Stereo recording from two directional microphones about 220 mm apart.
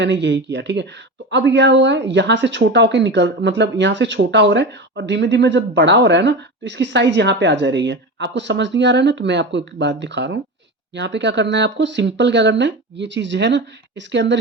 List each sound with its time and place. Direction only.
0.0 s speech: 55° right (ahead or behind)